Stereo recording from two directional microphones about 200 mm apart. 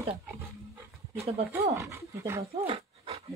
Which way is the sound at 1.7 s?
15° right (ahead or behind).